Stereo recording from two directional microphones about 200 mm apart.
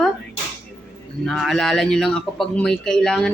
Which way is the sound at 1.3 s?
Centre (ahead or behind).